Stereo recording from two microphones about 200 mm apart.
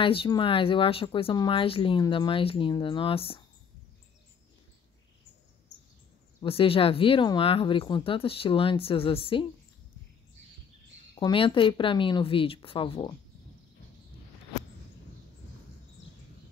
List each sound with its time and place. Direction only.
0.0 s speech: 25° left (ahead or behind)
6.4 s speech: 30° left (ahead or behind)
11.1 s speech: 25° left (ahead or behind)